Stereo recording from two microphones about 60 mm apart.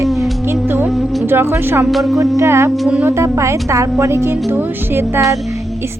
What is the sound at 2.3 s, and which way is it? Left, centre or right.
A woman's voice, right.